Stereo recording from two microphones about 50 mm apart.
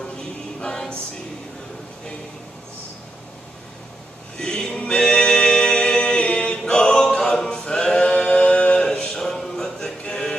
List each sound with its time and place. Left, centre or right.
0.0 s choir: centre
4.4 s music: centre
7.3 s a sound: centre
7.6 s a capella: centre